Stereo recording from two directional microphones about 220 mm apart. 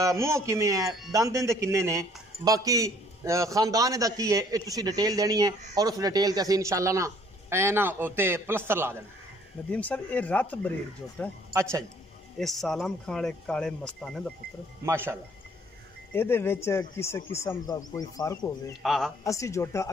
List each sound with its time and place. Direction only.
0.0 s speech: 15° right (ahead or behind)
9.7 s speech: 5° left (ahead or behind)
12.4 s speech: centre (ahead or behind)
14.9 s speech: 10° right (ahead or behind)
16.1 s speech: 10° left (ahead or behind)
18.8 s speech: centre (ahead or behind)
19.2 s speech: 15° left (ahead or behind)